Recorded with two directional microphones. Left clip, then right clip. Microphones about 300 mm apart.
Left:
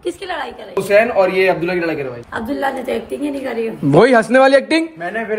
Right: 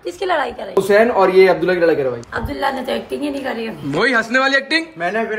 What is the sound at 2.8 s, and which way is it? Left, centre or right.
Speech, centre.